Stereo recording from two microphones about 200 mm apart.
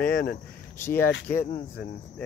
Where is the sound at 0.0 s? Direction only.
45° left (ahead or behind).